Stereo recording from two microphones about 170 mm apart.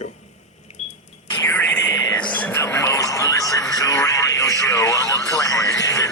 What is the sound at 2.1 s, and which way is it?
Music, 10° left (ahead or behind).